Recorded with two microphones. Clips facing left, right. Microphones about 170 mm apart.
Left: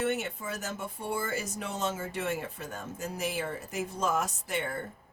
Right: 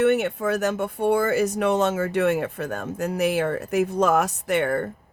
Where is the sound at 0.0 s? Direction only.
65° right (ahead or behind).